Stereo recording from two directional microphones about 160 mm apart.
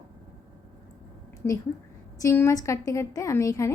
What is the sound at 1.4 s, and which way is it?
A woman's voice, 15° left (ahead or behind).